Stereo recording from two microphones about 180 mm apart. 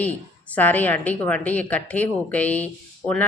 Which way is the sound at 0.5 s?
10° left (ahead or behind).